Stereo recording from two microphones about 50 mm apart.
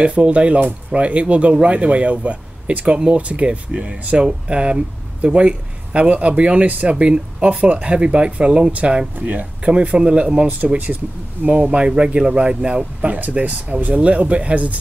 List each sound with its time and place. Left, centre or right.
0.0 s speech: right